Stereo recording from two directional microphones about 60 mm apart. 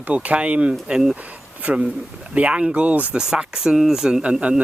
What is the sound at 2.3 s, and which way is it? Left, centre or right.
Speech, right.